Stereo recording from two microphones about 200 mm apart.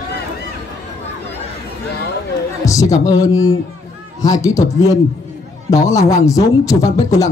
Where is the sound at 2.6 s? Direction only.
15° left (ahead or behind).